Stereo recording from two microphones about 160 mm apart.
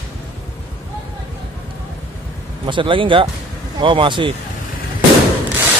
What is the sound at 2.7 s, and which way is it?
Speech, 30° right (ahead or behind).